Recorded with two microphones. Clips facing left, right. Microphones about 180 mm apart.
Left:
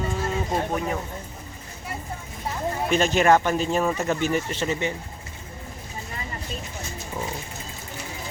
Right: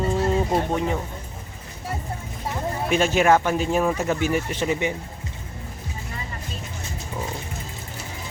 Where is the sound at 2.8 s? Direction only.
10° right (ahead or behind).